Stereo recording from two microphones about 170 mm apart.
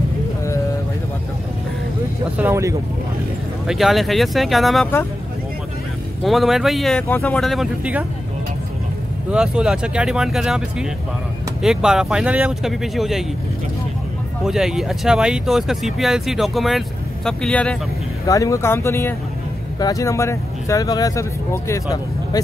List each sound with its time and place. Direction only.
2.3 s speech: 15° right (ahead or behind)
3.6 s speech: centre (ahead or behind)
6.2 s speech: centre (ahead or behind)
9.3 s speech: 5° right (ahead or behind)
14.4 s speech: 5° right (ahead or behind)
18.2 s speech: 20° left (ahead or behind)